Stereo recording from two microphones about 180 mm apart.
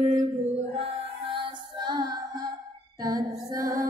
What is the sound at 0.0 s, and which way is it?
Female singing, 35° right (ahead or behind).